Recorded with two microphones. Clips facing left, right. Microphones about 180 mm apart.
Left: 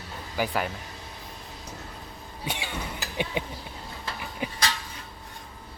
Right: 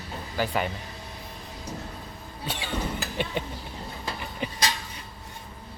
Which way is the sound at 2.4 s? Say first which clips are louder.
Even; 10° left (ahead or behind).